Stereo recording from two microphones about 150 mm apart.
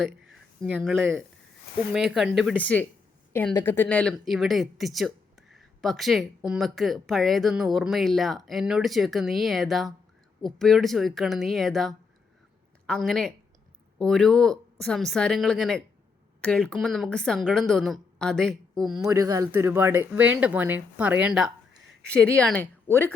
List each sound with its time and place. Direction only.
0.3 s a sound: centre (ahead or behind)
0.9 s speech: 15° right (ahead or behind)
1.9 s speech: centre (ahead or behind)
2.6 s speech: 10° left (ahead or behind)
18.9 s speech: 20° right (ahead or behind); by 21.5 s 5° right (ahead or behind)
22.4 s speech: 10° left (ahead or behind)